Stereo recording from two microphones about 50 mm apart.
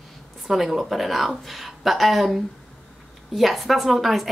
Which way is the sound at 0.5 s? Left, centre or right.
Centre.